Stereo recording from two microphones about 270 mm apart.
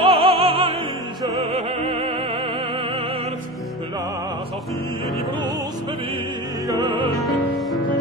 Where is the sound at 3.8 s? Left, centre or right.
Centre.